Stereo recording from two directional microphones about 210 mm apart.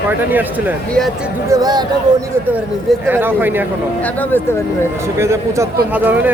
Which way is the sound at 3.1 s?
10° right (ahead or behind).